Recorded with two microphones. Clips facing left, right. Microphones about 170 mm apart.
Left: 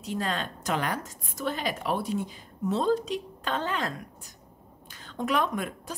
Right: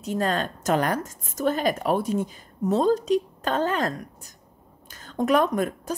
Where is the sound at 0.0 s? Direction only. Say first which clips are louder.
Right 6 dB; 45° right (ahead or behind).